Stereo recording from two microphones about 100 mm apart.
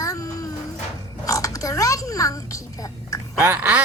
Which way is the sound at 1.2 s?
35° left (ahead or behind).